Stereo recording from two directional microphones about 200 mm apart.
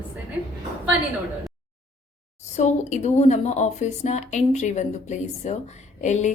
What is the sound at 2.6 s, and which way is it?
Speech, 35° left (ahead or behind).